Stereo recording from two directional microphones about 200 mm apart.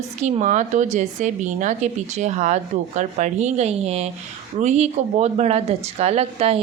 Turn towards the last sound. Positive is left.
turn(degrees=-30)  # may be behind; listen again after turning